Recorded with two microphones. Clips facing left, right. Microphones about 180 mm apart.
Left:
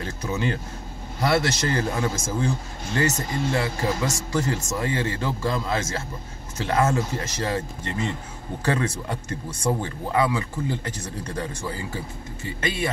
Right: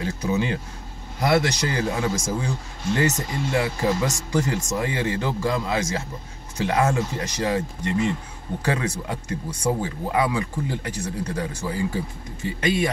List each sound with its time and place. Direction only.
0.0 s speech: 15° right (ahead or behind)